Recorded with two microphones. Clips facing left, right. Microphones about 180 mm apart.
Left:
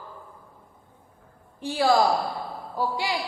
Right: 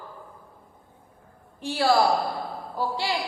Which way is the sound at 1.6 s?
15° left (ahead or behind).